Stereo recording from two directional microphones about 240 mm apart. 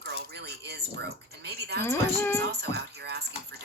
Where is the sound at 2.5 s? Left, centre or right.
Right.